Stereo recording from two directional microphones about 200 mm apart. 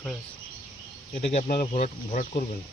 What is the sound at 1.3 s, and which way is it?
Speech, 30° left (ahead or behind).